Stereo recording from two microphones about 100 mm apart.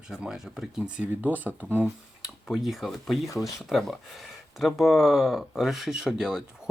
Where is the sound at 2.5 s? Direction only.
Centre (ahead or behind).